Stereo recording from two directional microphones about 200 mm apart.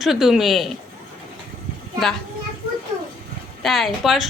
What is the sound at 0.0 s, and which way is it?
Speech, centre (ahead or behind).